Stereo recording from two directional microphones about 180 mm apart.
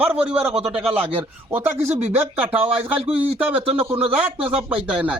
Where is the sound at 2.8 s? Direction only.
10° right (ahead or behind).